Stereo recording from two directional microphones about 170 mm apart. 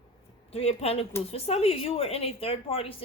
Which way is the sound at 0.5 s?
35° left (ahead or behind).